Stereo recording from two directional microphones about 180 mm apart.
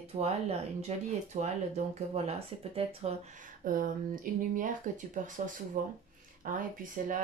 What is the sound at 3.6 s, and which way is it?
Speech, 50° right (ahead or behind).